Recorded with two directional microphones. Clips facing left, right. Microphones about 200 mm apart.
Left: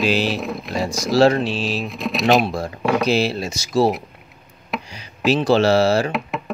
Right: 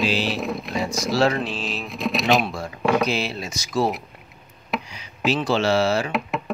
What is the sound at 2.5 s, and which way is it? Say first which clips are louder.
Speech: left 5 dB; 35° left (ahead or behind).